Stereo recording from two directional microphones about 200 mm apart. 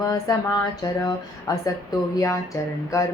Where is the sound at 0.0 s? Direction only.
15° left (ahead or behind).